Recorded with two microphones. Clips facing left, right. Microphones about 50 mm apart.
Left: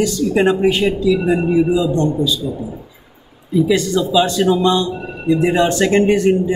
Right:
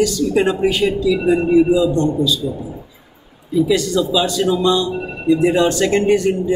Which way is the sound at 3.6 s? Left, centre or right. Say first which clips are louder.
Even; left.